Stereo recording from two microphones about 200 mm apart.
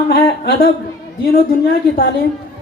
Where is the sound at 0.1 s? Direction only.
50° left (ahead or behind).